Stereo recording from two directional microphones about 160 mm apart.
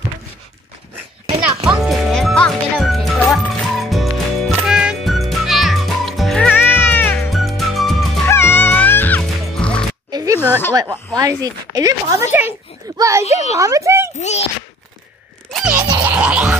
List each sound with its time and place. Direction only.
1.6 s music: centre (ahead or behind)
7.2 s music: centre (ahead or behind)
8.3 s music: 15° left (ahead or behind)
10.1 s a sound: 20° right (ahead or behind)
10.4 s speech: 15° left (ahead or behind)
10.7 s a child's voice: 20° right (ahead or behind)
14.2 s speech: 45° left (ahead or behind)
15.5 s music: 5° right (ahead or behind)